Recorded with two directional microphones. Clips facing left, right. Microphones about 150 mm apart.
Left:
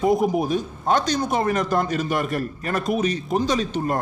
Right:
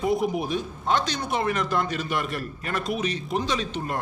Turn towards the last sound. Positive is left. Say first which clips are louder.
# left 6 dB
turn(degrees=45)  # may be behind; listen again after turning